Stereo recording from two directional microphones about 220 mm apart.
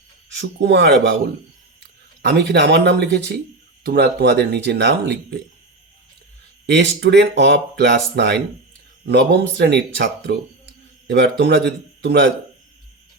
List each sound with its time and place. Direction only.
0.3 s speech: 50° right (ahead or behind)
6.7 s speech: 50° right (ahead or behind)